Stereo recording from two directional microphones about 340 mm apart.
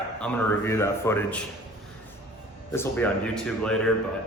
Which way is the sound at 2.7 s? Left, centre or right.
Centre.